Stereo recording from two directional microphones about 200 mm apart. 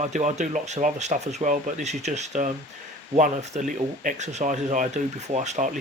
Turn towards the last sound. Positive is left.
turn(degrees=-35)  # may be behind; listen again after turning